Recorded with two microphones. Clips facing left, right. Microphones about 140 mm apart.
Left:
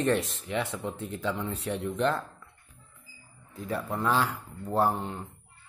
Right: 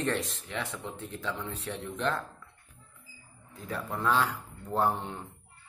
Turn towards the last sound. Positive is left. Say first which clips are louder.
# left 2 dB
turn(degrees=0)  # may be behind; listen again after turning